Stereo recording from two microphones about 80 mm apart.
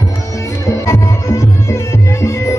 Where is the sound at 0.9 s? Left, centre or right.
Left.